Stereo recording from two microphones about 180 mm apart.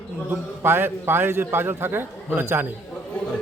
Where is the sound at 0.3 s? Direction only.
10° right (ahead or behind).